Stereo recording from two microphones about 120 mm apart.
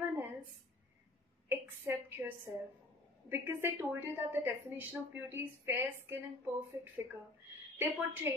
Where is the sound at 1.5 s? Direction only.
15° right (ahead or behind).